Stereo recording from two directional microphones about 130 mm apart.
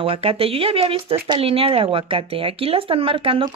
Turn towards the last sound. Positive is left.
turn(degrees=-45)  # may be behind; listen again after turning